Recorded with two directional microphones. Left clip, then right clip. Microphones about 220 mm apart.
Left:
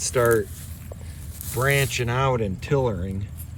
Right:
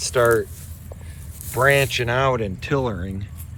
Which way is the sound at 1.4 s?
15° left (ahead or behind).